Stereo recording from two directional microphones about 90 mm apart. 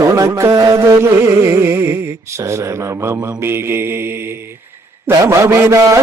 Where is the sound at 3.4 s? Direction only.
30° right (ahead or behind).